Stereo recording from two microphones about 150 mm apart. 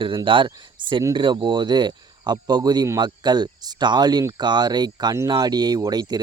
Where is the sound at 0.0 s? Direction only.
35° right (ahead or behind).